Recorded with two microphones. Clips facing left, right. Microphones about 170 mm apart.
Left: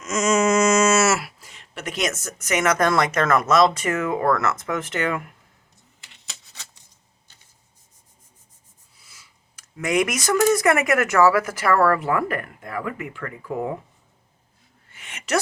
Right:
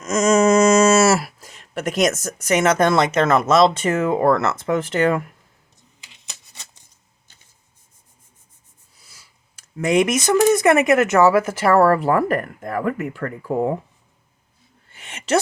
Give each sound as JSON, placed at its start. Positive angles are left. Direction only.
{"t": 0.0, "sound": "speech", "side_deg": -40}
{"t": 6.0, "sound": "rub", "side_deg": -15}
{"t": 9.0, "sound": "speech", "side_deg": -35}
{"t": 14.8, "sound": "a sound", "side_deg": -30}